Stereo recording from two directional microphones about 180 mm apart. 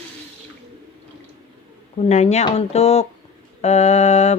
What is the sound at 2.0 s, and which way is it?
Speech, 40° left (ahead or behind).